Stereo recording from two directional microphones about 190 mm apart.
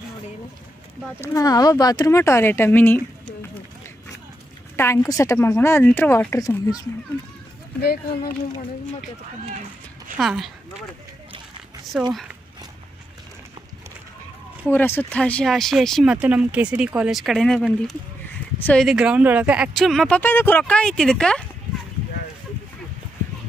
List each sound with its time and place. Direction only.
1.2 s speech: 20° left (ahead or behind)
4.7 s speech: 15° left (ahead or behind)
7.8 s speech: 55° left (ahead or behind)
10.1 s speech: centre (ahead or behind)
12.1 s speech: centre (ahead or behind)
14.7 s speech: 10° left (ahead or behind)